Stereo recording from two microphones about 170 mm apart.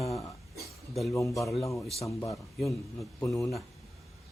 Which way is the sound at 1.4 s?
Centre (ahead or behind).